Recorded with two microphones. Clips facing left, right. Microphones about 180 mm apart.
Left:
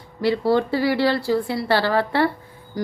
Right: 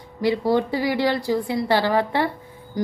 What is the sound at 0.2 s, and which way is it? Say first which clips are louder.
Speech: left 1 dB; 15° right (ahead or behind).